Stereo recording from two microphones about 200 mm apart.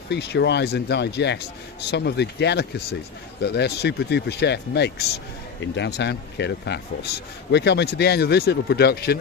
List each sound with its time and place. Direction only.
0.1 s speech: 60° left (ahead or behind)